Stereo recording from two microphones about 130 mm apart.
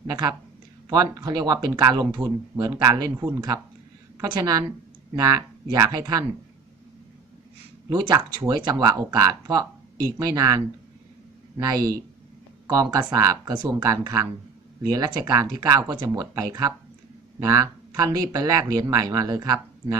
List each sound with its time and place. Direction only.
0.0 s a woman's voice: 30° right (ahead or behind)
7.9 s speech: 30° right (ahead or behind)
13.1 s speech: 25° right (ahead or behind)